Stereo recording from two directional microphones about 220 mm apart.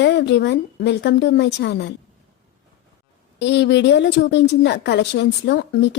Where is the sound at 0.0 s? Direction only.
50° left (ahead or behind).